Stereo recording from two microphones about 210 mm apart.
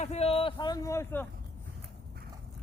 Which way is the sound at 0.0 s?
30° left (ahead or behind).